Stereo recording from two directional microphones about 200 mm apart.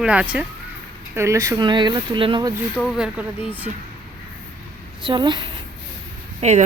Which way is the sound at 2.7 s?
5° right (ahead or behind).